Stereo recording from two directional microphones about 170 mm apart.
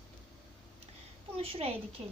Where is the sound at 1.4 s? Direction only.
35° right (ahead or behind).